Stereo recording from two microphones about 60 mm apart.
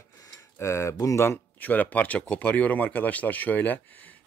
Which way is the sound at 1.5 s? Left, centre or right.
Left.